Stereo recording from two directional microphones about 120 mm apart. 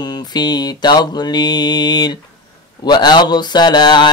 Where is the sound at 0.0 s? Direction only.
35° left (ahead or behind).